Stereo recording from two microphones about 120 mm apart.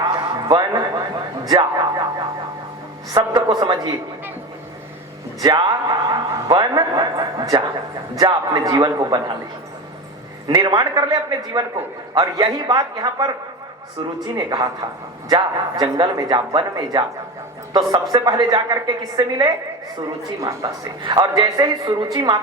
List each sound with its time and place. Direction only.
0.4 s a man's voice: 30° right (ahead or behind)
5.4 s a man's voice: 35° right (ahead or behind)
10.5 s a man's voice: 35° right (ahead or behind)
14.3 s a man's voice: 30° right (ahead or behind)
18.1 s a man's voice: 30° right (ahead or behind)